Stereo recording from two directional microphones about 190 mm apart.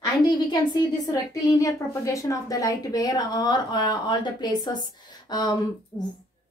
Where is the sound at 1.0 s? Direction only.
15° left (ahead or behind).